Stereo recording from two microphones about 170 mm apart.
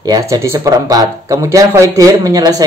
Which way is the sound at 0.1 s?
20° right (ahead or behind).